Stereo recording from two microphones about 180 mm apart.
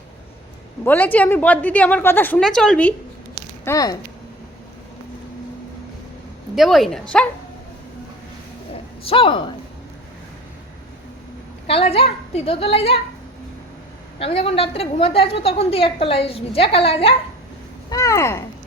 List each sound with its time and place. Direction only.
0.9 s a woman's voice: 10° left (ahead or behind)
3.6 s a woman's voice: 15° left (ahead or behind)
6.6 s speech: centre (ahead or behind)
9.0 s speech: 30° left (ahead or behind)
11.7 s a woman's voice: 35° left (ahead or behind)
14.2 s a woman's voice: 35° left (ahead or behind)
17.8 s a woman's voice: 20° left (ahead or behind)